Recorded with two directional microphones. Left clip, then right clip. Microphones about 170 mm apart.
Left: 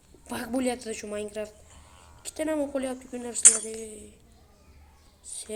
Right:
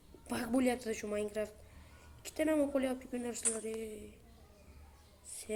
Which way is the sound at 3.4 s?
55° left (ahead or behind).